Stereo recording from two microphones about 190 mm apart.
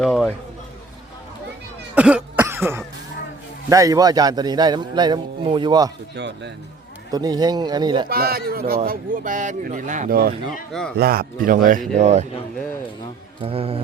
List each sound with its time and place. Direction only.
0.0 s a sound: centre (ahead or behind)
2.0 s cough: 5° right (ahead or behind)
3.7 s a man's voice: 15° right (ahead or behind)
6.1 s speech: 65° right (ahead or behind)
7.1 s a man's voice: 20° right (ahead or behind)
8.1 s speech: 55° right (ahead or behind)
10.7 s speech: 5° left (ahead or behind)
10.9 s speech: 55° right (ahead or behind); by 12.2 s 35° right (ahead or behind)
13.4 s speech: 30° right (ahead or behind)